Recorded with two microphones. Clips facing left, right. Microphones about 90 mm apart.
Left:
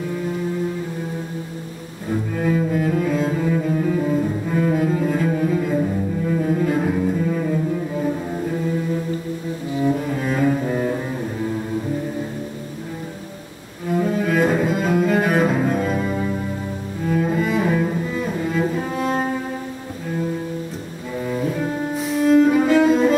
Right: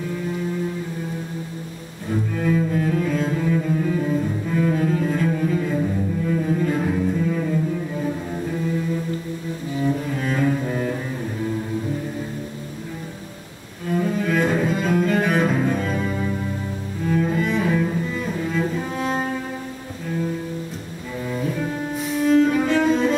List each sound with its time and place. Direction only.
2.0 s cello: 5° left (ahead or behind)
9.8 s cello: 15° left (ahead or behind)
13.9 s cello: 5° left (ahead or behind)
21.3 s cello: 10° left (ahead or behind)